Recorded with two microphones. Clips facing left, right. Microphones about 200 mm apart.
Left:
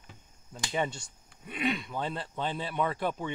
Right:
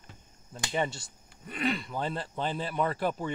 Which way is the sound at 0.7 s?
Centre (ahead or behind).